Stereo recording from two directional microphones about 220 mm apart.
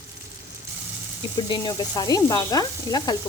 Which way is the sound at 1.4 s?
20° left (ahead or behind).